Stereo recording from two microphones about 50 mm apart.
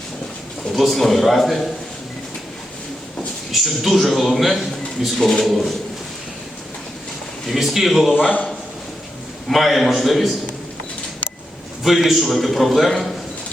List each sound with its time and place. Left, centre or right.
0.7 s a man's voice: centre
3.5 s a man's voice: centre
7.4 s a man's voice: centre
9.5 s a man's voice: centre
11.8 s a man's voice: centre